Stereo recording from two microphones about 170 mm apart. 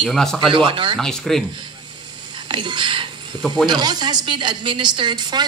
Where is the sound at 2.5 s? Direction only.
30° right (ahead or behind).